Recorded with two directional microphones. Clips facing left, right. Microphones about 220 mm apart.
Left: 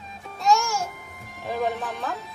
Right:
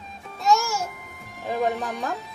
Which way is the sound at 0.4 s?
Centre (ahead or behind).